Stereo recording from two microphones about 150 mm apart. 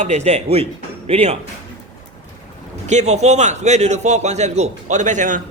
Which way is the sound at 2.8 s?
50° right (ahead or behind).